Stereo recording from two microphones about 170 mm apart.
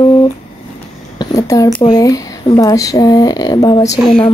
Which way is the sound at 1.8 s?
25° left (ahead or behind).